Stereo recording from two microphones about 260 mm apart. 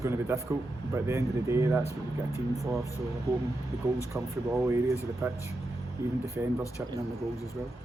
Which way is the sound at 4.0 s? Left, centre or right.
Centre.